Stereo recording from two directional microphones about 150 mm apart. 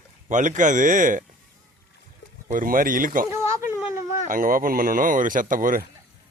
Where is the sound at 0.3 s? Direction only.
55° right (ahead or behind).